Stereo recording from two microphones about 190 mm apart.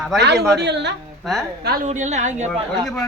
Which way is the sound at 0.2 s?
60° right (ahead or behind).